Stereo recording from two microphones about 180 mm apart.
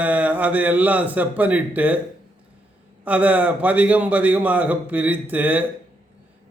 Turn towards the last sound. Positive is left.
turn(degrees=-10)  # may be behind; listen again after turning